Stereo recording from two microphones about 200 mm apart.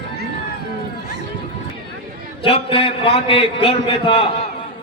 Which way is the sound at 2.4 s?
30° left (ahead or behind).